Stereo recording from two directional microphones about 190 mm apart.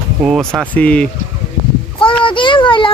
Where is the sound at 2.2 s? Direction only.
25° left (ahead or behind).